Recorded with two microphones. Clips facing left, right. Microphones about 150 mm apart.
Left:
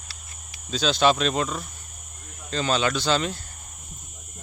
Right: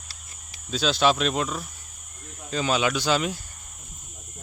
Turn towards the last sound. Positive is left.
turn(degrees=-10)  # may be behind; listen again after turning